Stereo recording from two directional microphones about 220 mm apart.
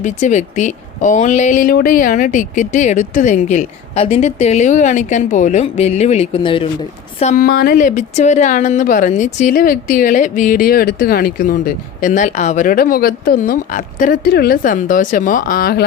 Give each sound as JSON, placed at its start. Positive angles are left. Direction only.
{"t": 0.0, "sound": "a woman's voice", "side_deg": 35}
{"t": 7.2, "sound": "a woman's voice", "side_deg": 35}